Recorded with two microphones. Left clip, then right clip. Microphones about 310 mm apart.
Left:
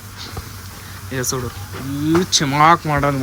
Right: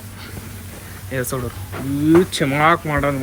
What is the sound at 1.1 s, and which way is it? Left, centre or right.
Speech, centre.